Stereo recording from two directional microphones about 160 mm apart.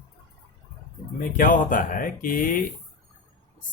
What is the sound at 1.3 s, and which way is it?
Speech, 55° left (ahead or behind).